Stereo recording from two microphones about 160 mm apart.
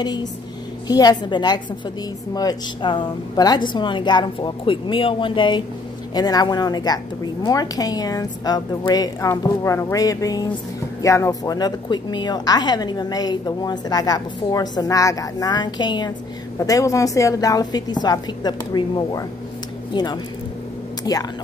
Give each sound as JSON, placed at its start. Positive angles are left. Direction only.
{"t": 0.0, "sound": "a woman's voice", "side_deg": 25}